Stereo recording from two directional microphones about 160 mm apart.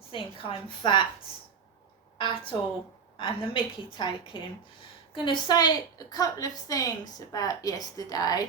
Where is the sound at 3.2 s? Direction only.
30° left (ahead or behind).